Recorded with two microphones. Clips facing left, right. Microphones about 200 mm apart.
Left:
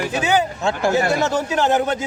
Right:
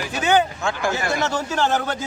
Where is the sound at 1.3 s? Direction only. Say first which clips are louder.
Left 3 dB; 15° left (ahead or behind).